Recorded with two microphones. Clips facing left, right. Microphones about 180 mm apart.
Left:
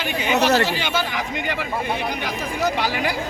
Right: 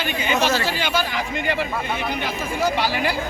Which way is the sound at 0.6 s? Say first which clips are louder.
Even; 20° left (ahead or behind).